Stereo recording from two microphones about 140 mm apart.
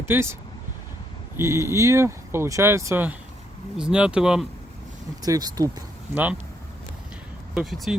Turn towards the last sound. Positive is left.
turn(degrees=0)  # may be behind; listen again after turning